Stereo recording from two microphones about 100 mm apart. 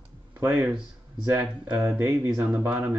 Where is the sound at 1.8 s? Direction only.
30° right (ahead or behind).